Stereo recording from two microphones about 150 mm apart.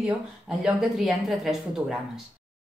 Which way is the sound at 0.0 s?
5° right (ahead or behind).